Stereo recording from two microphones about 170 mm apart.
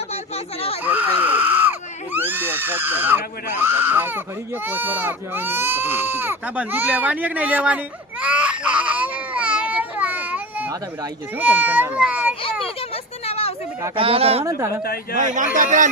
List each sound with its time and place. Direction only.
0.9 s screaming: 10° right (ahead or behind)
2.1 s speech: 10° right (ahead or behind)
8.2 s baby cry: 5° right (ahead or behind)
11.3 s speech: 10° right (ahead or behind)
13.2 s a sound: 35° left (ahead or behind)
13.9 s speech: 35° right (ahead or behind)
14.4 s speech: 20° right (ahead or behind)
15.1 s speech: 50° right (ahead or behind)